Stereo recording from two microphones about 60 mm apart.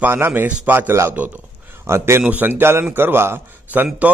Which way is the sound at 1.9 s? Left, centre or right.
Right.